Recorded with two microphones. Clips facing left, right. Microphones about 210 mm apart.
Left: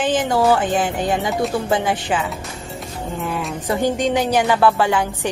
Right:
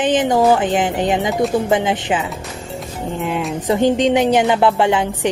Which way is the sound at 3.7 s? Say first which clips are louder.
Right 5 dB; 20° right (ahead or behind).